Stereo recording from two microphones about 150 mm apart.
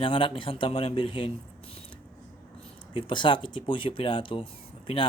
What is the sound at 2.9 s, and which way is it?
Speech, 35° left (ahead or behind).